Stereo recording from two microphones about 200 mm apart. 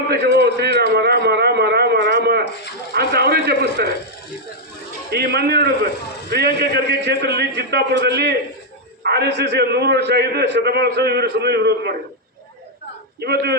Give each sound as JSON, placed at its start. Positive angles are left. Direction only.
{"t": 0.1, "sound": "a man's voice", "side_deg": -55}
{"t": 5.1, "sound": "a man's voice", "side_deg": -55}
{"t": 13.1, "sound": "a man's voice", "side_deg": -55}